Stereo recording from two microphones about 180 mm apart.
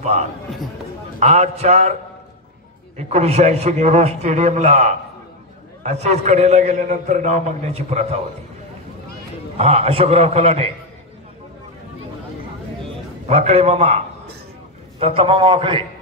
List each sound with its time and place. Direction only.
1.2 s a man's voice: 35° right (ahead or behind)
3.0 s a man's voice: 35° right (ahead or behind)
9.6 s a man's voice: 35° right (ahead or behind)
13.3 s a man's voice: 35° right (ahead or behind)